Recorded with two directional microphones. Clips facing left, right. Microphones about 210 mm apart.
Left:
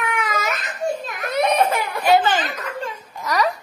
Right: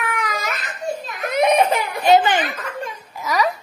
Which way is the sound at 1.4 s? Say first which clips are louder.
Right 2 dB; 15° right (ahead or behind).